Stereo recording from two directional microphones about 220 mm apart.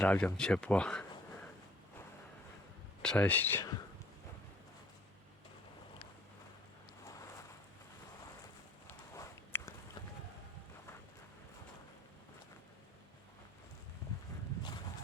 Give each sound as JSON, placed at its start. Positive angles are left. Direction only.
{"t": 0.0, "sound": "speech", "side_deg": 5}
{"t": 3.0, "sound": "speech", "side_deg": 5}
{"t": 7.0, "sound": "a sound", "side_deg": 15}
{"t": 8.9, "sound": "walk", "side_deg": 10}